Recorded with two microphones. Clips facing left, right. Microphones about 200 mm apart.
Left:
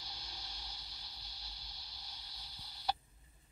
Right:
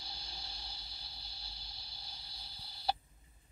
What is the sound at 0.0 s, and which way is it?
Vehicle, 30° right (ahead or behind).